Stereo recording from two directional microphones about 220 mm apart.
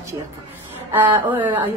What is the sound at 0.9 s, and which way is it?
Speech, 10° right (ahead or behind).